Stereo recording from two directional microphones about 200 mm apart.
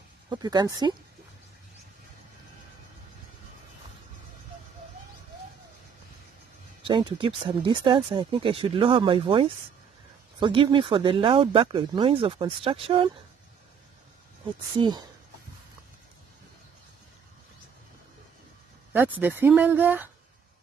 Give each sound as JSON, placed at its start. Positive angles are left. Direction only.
{"t": 0.3, "sound": "speech", "side_deg": -20}
{"t": 6.8, "sound": "speech", "side_deg": -25}
{"t": 14.8, "sound": "speech", "side_deg": -20}
{"t": 18.9, "sound": "speech", "side_deg": -10}